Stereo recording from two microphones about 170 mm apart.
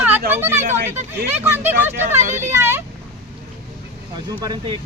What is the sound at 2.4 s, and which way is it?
Vehicle, 15° right (ahead or behind).